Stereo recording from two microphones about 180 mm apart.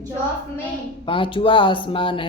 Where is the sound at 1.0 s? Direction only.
30° left (ahead or behind).